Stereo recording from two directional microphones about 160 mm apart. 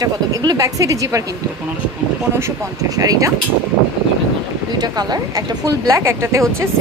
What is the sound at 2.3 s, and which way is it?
Speech, 20° right (ahead or behind).